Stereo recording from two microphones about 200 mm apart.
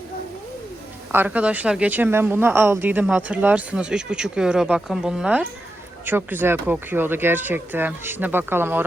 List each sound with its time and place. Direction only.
1.1 s speech: 10° right (ahead or behind)